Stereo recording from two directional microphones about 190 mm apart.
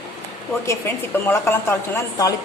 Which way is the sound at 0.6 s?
15° left (ahead or behind).